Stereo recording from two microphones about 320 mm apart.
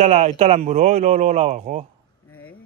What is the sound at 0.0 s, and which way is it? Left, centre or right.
Speech, right.